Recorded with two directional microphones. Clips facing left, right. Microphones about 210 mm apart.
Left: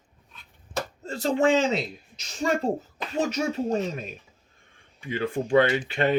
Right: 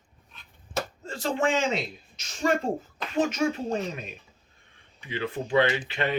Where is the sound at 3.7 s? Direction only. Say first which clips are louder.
Left 3 dB; 40° left (ahead or behind).